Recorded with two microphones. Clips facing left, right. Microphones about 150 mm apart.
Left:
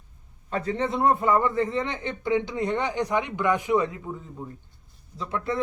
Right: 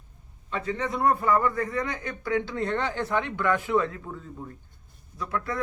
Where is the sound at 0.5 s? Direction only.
35° left (ahead or behind).